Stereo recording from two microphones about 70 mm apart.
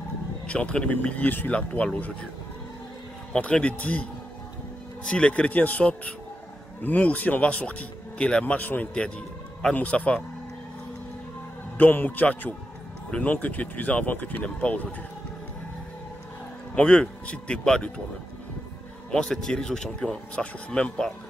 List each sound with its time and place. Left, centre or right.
0.5 s speech: centre
3.3 s speech: centre
5.0 s speech: centre
11.8 s speech: left
16.7 s speech: centre
19.1 s speech: centre